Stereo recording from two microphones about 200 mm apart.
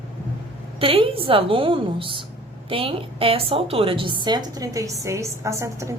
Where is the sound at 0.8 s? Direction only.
25° right (ahead or behind).